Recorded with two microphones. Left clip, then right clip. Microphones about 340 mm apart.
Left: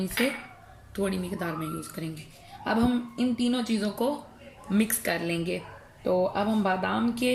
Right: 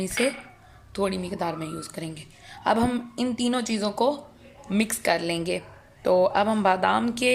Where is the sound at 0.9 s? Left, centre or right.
Centre.